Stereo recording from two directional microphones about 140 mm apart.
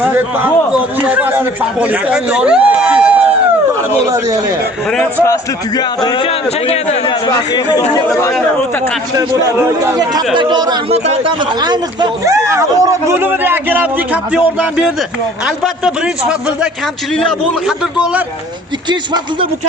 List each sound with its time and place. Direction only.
0.0 s a man's voice: 15° right (ahead or behind)
3.7 s speech: 20° right (ahead or behind)
5.2 s speech: 25° left (ahead or behind)
6.2 s a man's voice: 50° left (ahead or behind)
7.1 s speech: 30° left (ahead or behind)
9.1 s speech: 20° right (ahead or behind)
10.8 s a man's voice: 45° right (ahead or behind); by 15.9 s 5° right (ahead or behind)
17.2 s a man's voice: centre (ahead or behind)
18.9 s speech: 30° right (ahead or behind)